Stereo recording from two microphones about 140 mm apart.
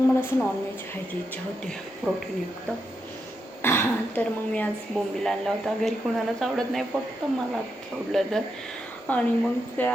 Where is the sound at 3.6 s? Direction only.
15° left (ahead or behind); by 6.8 s centre (ahead or behind).